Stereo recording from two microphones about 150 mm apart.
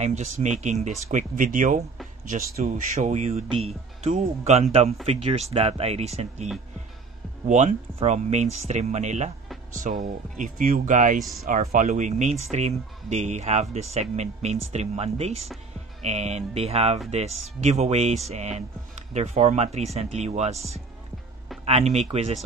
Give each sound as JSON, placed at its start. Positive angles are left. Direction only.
{"t": 0.0, "sound": "speech", "side_deg": -50}
{"t": 2.2, "sound": "speech", "side_deg": -70}
{"t": 2.9, "sound": "speech", "side_deg": -50}